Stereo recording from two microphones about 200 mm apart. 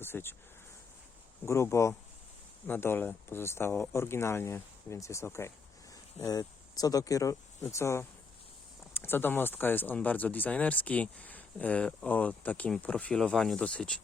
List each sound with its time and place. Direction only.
0.0 s speech: 10° left (ahead or behind)
1.5 s speech: 15° left (ahead or behind)